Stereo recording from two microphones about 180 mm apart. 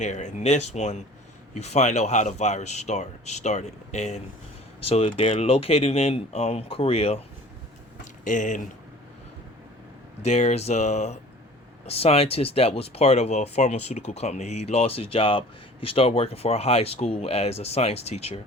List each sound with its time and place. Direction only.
0.0 s speech: 40° left (ahead or behind)
8.2 s speech: 45° left (ahead or behind)
10.2 s speech: 35° left (ahead or behind)